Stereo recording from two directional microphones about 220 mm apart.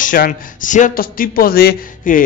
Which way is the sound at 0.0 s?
35° left (ahead or behind).